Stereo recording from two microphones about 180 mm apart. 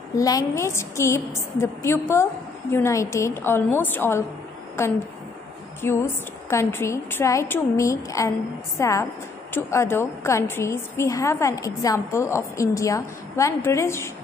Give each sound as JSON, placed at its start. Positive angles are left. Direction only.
{"t": 0.1, "sound": "a woman's voice", "side_deg": 20}